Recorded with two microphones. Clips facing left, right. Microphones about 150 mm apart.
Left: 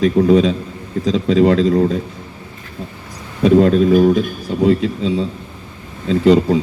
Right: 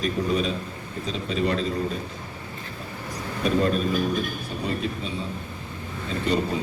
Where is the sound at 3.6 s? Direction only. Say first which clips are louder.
Left 12 dB; 90° left.